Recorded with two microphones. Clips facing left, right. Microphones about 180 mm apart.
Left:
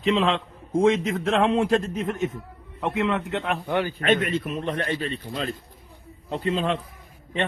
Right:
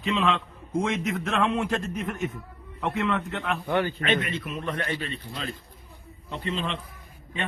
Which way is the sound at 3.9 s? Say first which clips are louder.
Left 5 dB; 45° left (ahead or behind).